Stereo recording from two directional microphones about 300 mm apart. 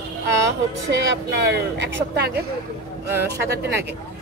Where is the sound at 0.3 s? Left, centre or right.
Right.